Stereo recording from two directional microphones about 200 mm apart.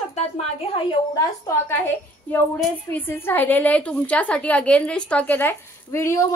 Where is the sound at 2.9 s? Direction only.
10° left (ahead or behind).